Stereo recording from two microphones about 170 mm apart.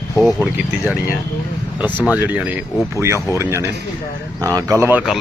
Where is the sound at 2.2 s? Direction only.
10° right (ahead or behind).